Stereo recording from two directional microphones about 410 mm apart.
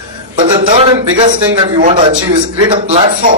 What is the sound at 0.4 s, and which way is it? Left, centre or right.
Speech, centre.